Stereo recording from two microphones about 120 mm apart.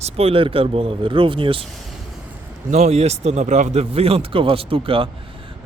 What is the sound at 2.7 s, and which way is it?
Speech, 65° right (ahead or behind).